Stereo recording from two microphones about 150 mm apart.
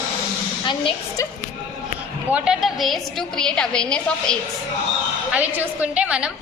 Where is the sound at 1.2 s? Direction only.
20° left (ahead or behind).